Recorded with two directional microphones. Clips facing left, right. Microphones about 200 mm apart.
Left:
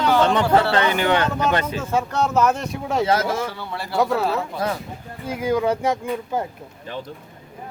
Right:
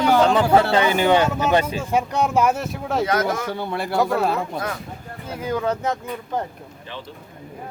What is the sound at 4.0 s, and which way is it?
Speech, centre (ahead or behind).